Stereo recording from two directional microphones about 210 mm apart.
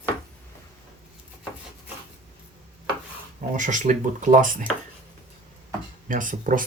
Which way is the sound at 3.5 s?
35° right (ahead or behind).